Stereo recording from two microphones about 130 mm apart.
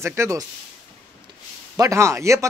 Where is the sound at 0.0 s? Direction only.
20° right (ahead or behind).